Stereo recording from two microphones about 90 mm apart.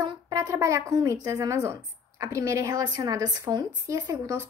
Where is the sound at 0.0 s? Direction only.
45° right (ahead or behind).